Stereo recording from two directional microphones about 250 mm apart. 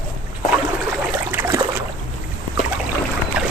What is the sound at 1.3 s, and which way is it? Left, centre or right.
Boat, centre.